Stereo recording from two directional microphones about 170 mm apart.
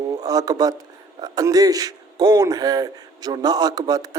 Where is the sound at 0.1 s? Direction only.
20° right (ahead or behind).